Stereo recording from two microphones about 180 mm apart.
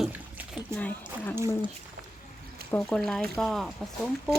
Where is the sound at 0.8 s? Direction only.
10° left (ahead or behind).